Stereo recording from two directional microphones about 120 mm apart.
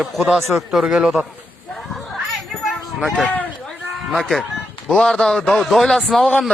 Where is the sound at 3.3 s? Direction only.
15° left (ahead or behind).